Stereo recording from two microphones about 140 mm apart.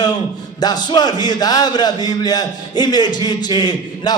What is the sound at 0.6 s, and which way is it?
A man's voice, 30° left (ahead or behind).